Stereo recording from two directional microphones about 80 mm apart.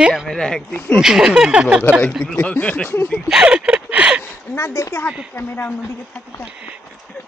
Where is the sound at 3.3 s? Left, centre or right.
Centre.